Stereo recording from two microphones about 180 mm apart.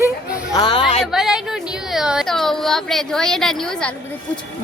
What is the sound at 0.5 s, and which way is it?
Speech, 25° left (ahead or behind).